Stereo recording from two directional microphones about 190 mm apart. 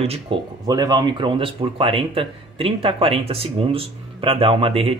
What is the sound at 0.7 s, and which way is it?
Speech, 20° right (ahead or behind).